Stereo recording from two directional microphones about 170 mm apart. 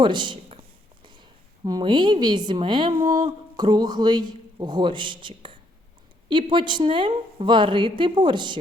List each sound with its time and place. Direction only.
0.0 s a woman's voice: 25° right (ahead or behind)